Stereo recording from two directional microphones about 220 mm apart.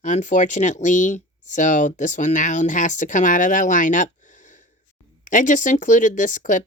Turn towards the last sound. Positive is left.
turn(degrees=35)  # may be behind; listen again after turning